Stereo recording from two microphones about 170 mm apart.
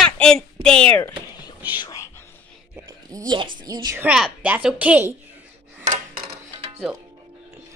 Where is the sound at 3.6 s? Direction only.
20° right (ahead or behind).